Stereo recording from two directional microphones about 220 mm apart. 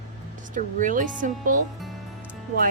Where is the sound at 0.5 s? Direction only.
35° right (ahead or behind).